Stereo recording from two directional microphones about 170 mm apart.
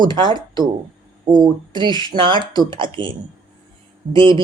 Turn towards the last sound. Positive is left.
turn(degrees=-30)  # may be behind; listen again after turning